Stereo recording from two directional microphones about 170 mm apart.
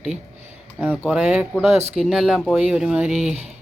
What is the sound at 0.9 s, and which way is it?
Speech, 5° right (ahead or behind).